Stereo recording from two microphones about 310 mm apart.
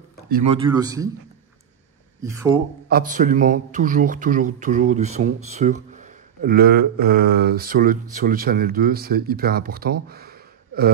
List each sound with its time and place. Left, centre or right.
0.3 s speech: centre
2.2 s speech: centre
2.9 s a man's voice: right
10.0 s gasp: right